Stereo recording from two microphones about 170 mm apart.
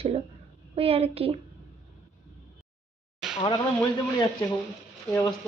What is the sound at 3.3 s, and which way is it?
Speech, 30° left (ahead or behind).